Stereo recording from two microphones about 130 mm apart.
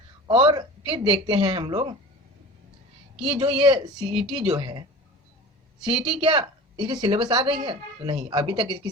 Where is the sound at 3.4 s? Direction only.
40° right (ahead or behind).